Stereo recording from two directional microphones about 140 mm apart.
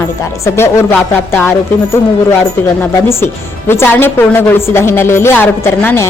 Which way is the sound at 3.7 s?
15° left (ahead or behind).